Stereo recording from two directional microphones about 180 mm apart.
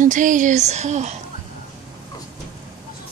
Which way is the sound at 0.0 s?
45° right (ahead or behind).